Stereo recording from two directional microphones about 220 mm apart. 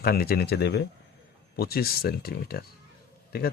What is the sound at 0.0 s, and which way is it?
A man's voice, 45° left (ahead or behind).